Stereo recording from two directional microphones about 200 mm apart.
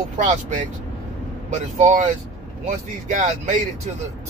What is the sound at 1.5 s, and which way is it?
Speech, 40° right (ahead or behind).